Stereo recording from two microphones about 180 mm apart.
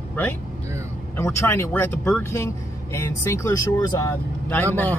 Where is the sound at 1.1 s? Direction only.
15° left (ahead or behind).